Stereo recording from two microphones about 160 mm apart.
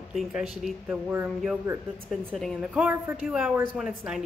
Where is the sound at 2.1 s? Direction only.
5° left (ahead or behind).